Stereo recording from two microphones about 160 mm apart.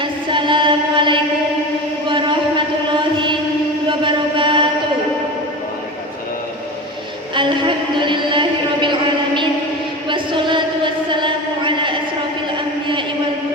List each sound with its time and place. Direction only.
0.0 s chant: 30° right (ahead or behind)
4.0 s chant: 30° right (ahead or behind)
7.3 s a sound: 30° right (ahead or behind)